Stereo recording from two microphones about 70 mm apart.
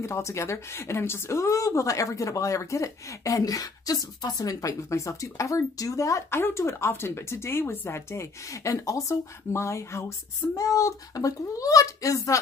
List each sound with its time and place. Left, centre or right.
0.0 s a woman's voice: left
6.3 s a woman's voice: left